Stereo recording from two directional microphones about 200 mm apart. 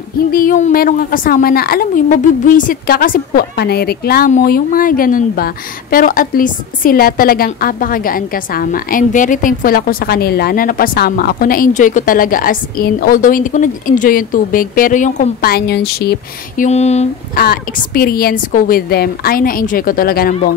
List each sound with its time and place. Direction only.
0.3 s a woman's voice: 45° left (ahead or behind)
16.6 s speech: 35° left (ahead or behind)
17.4 s a woman's voice: 50° left (ahead or behind)